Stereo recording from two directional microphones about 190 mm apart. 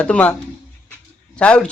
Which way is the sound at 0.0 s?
5° left (ahead or behind).